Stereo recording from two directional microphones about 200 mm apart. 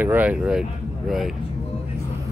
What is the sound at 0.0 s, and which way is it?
Speech, 10° right (ahead or behind).